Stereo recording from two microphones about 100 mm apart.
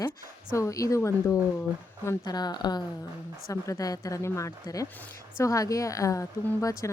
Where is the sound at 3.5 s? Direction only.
35° left (ahead or behind).